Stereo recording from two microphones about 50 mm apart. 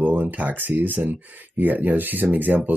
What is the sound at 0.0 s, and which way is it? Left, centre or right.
Speech, right.